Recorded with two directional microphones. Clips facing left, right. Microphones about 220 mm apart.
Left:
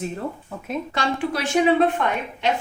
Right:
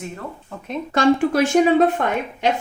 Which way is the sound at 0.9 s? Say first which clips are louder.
Right 11 dB; 45° right (ahead or behind).